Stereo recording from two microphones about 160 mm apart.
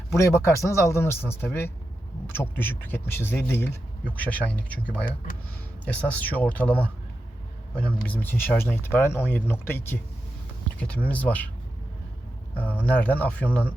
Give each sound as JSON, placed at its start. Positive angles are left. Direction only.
{"t": 0.1, "sound": "speech", "side_deg": 15}
{"t": 8.0, "sound": "speech", "side_deg": 10}
{"t": 12.5, "sound": "speech", "side_deg": 10}